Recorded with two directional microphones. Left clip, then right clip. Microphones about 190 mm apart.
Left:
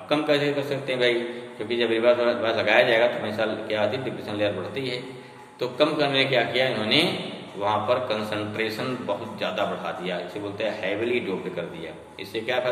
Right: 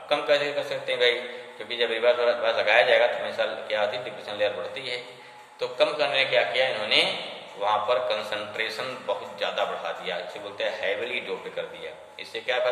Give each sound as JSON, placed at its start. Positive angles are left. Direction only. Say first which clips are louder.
{"t": 0.1, "sound": "a man's voice", "louder": "left 1 dB", "side_deg": 0}